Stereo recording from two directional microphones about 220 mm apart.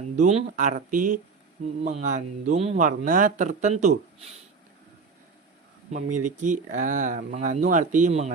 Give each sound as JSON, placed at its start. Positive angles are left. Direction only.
{"t": 0.2, "sound": "speech", "side_deg": -35}
{"t": 6.1, "sound": "speech", "side_deg": -35}